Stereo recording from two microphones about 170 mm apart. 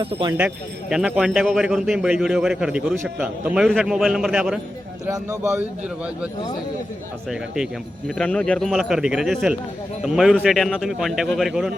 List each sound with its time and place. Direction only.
0.0 s speech: 30° right (ahead or behind)
0.3 s speech: 5° right (ahead or behind)
5.0 s a man's voice: 15° right (ahead or behind)
7.3 s speech: 5° right (ahead or behind)